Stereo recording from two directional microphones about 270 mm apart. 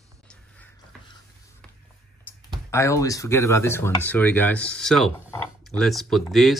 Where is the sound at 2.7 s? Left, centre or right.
Centre.